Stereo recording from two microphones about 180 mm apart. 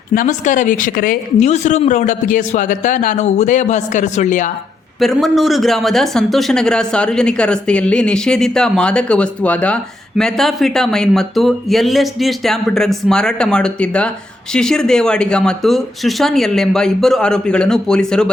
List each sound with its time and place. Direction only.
0.1 s speech: 45° left (ahead or behind)
4.9 s speech: centre (ahead or behind)